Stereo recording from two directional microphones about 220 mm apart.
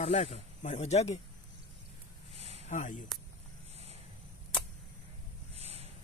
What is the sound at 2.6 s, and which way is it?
Speech, 35° left (ahead or behind).